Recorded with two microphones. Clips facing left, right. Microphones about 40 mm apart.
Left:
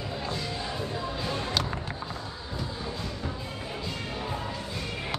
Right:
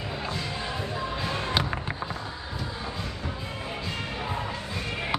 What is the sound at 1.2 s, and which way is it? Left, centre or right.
Music, right.